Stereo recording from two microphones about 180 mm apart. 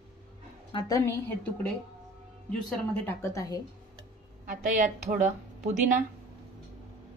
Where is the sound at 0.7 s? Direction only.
20° left (ahead or behind).